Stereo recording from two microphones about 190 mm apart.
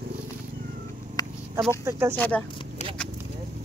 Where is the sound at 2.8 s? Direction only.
35° left (ahead or behind).